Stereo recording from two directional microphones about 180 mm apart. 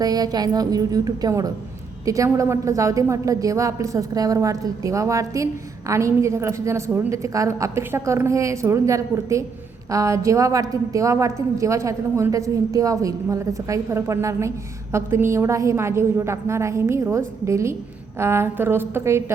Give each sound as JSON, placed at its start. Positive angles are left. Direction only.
{"t": 0.0, "sound": "music", "side_deg": -20}
{"t": 2.0, "sound": "a woman's voice", "side_deg": -15}